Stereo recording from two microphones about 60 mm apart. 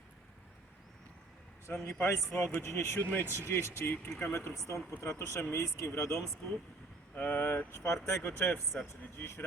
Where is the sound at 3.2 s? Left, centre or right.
Right.